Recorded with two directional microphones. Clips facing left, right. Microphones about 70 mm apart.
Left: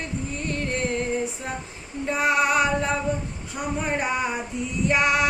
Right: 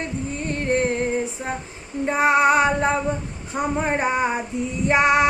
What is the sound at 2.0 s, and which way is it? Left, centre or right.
Child singing, right.